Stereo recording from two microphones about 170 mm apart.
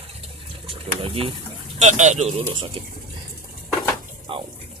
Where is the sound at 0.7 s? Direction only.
30° right (ahead or behind).